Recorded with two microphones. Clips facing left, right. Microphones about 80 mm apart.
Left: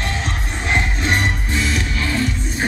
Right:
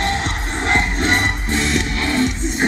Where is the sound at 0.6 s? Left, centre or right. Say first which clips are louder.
Right 2 dB; right.